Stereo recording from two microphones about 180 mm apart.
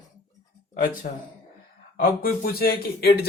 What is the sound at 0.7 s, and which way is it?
A man's voice, 45° left (ahead or behind).